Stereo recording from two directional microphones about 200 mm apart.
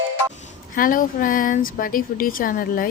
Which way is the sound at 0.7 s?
45° left (ahead or behind).